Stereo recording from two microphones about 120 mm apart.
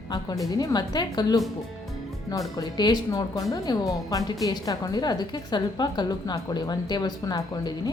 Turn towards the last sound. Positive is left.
turn(degrees=35)  # may be behind; listen again after turning